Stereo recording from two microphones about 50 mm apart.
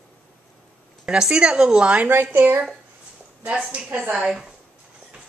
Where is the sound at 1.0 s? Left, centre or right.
Centre.